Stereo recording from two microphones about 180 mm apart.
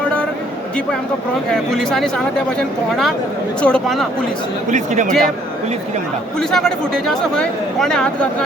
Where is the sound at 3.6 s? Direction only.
5° left (ahead or behind).